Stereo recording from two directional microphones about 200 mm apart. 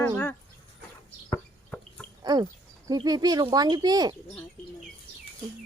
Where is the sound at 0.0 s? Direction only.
10° left (ahead or behind).